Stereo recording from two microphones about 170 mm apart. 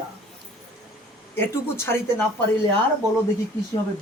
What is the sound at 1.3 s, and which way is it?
Speech, 15° left (ahead or behind).